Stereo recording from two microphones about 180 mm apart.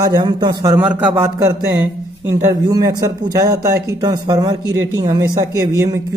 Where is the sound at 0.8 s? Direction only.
10° right (ahead or behind).